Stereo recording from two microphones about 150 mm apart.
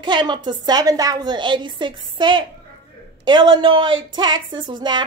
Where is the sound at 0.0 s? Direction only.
30° right (ahead or behind).